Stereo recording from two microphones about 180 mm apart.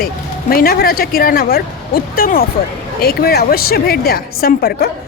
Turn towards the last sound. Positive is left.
turn(degrees=55)  # may be behind; listen again after turning